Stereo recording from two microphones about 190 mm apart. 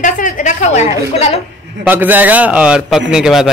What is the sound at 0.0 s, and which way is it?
A woman's voice, 45° left (ahead or behind).